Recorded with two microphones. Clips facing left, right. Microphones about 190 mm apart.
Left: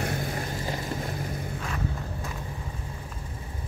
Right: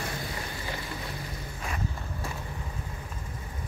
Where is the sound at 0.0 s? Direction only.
45° left (ahead or behind).